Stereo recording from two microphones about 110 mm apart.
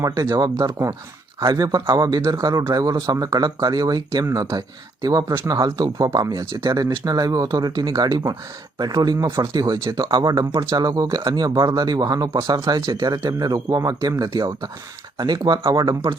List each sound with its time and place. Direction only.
0.0 s a man's voice: 35° right (ahead or behind)
9.2 s speech: 25° right (ahead or behind)
9.5 s a man's voice: 35° right (ahead or behind)
10.5 s speech: 25° right (ahead or behind)
10.8 s a man's voice: 35° right (ahead or behind)